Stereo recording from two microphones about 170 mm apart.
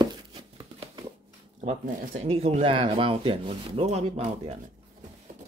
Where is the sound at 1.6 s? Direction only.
45° right (ahead or behind).